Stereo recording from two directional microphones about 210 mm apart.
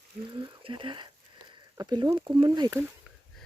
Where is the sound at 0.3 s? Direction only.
25° right (ahead or behind).